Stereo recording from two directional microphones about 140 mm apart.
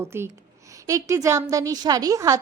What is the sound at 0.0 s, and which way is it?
A woman's voice, 20° right (ahead or behind).